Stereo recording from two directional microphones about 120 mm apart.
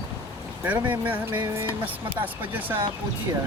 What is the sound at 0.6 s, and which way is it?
Speech, 15° right (ahead or behind).